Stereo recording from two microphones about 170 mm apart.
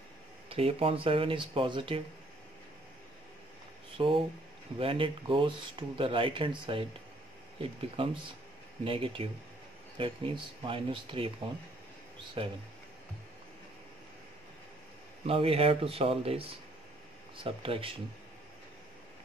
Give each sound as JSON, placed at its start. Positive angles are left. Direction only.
{"t": 0.5, "sound": "speech", "side_deg": -35}
{"t": 3.9, "sound": "speech", "side_deg": -30}
{"t": 7.9, "sound": "speech", "side_deg": -35}
{"t": 15.2, "sound": "speech", "side_deg": -35}